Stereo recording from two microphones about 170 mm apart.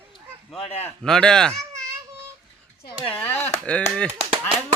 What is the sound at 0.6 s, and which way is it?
Speech, 35° left (ahead or behind).